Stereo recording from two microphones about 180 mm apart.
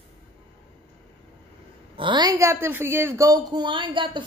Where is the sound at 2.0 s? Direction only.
25° right (ahead or behind).